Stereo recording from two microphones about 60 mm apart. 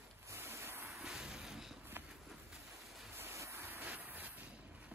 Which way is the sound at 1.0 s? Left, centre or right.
Centre.